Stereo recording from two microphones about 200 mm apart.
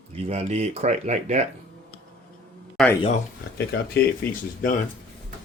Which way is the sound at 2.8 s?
Centre (ahead or behind).